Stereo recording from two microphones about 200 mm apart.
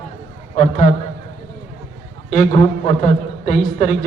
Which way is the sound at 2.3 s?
40° left (ahead or behind).